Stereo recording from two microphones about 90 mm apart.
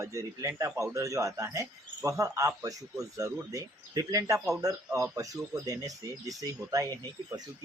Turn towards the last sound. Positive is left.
turn(degrees=-40)  # may be behind; listen again after turning